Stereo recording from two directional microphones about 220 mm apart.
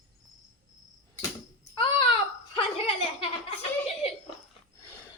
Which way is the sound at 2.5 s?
25° left (ahead or behind).